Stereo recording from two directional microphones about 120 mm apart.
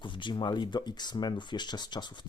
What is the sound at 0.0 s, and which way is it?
Speech, 40° left (ahead or behind).